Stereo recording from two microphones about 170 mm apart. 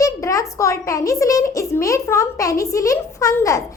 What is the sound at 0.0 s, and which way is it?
A child's voice, 20° left (ahead or behind).